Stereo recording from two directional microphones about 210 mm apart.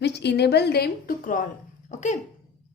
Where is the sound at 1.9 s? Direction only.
35° left (ahead or behind).